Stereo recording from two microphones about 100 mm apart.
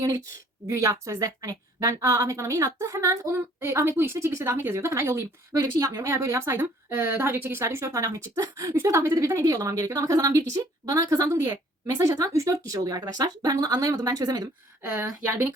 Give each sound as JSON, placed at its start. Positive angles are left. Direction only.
{"t": 0.7, "sound": "a woman's voice", "side_deg": -30}